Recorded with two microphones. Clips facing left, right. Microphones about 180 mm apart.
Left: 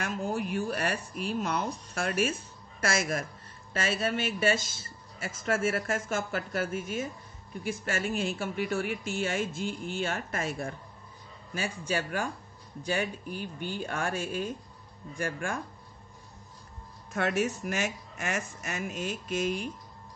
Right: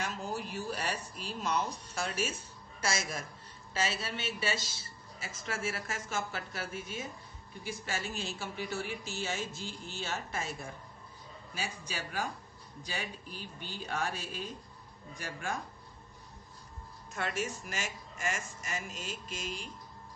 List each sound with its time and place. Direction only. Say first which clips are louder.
0.0 s a man's voice: left 6 dB; 60° left (ahead or behind)
17.1 s speech: left 7 dB; 60° left (ahead or behind)